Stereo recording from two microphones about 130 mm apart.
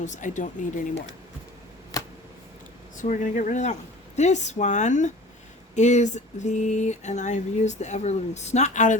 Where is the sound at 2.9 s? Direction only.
75° left (ahead or behind).